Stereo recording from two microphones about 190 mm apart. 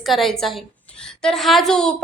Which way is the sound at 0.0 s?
Centre (ahead or behind).